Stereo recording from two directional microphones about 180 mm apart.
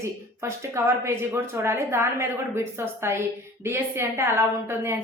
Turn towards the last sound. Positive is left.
turn(degrees=-15)  # may be behind; listen again after turning